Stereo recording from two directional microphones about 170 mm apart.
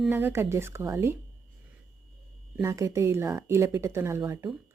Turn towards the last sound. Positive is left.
turn(degrees=-15)  # may be behind; listen again after turning